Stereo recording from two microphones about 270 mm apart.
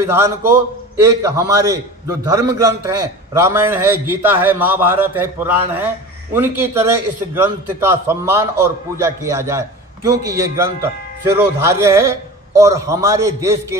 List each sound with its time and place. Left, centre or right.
0.0 s a man's voice: centre